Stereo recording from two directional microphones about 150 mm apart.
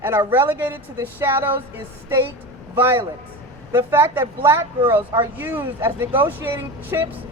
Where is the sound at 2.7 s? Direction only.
15° right (ahead or behind).